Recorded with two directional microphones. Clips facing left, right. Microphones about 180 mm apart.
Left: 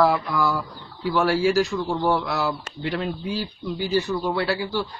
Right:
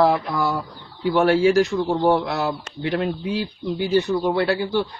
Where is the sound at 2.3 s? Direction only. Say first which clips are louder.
Right 1 dB; 55° right (ahead or behind).